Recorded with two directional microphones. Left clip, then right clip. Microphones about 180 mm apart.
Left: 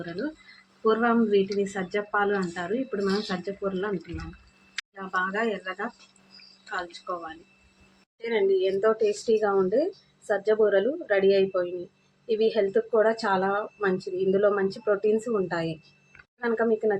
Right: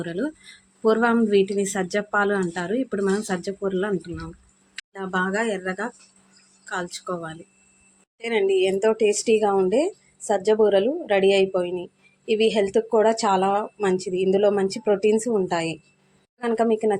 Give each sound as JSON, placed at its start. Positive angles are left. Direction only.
{"t": 0.9, "sound": "speech", "side_deg": -65}
{"t": 4.9, "sound": "speech", "side_deg": -65}
{"t": 8.2, "sound": "a woman's voice", "side_deg": -35}